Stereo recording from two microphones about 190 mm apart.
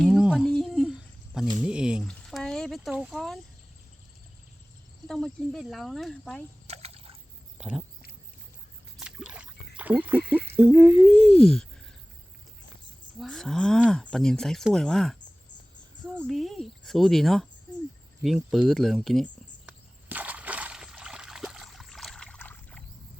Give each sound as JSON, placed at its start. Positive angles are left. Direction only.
{"t": 0.0, "sound": "a sound", "side_deg": -5}
{"t": 1.6, "sound": "speech", "side_deg": -5}
{"t": 5.0, "sound": "speech", "side_deg": 5}
{"t": 6.7, "sound": "liquid", "side_deg": -35}
{"t": 7.6, "sound": "a sound", "side_deg": -5}
{"t": 9.0, "sound": "rowboat", "side_deg": -5}
{"t": 10.5, "sound": "speech", "side_deg": -5}
{"t": 13.1, "sound": "speech", "side_deg": 0}
{"t": 16.2, "sound": "speech", "side_deg": 0}
{"t": 20.1, "sound": "water", "side_deg": -10}